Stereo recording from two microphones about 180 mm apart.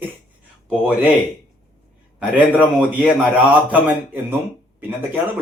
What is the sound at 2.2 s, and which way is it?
A man's voice, 10° right (ahead or behind).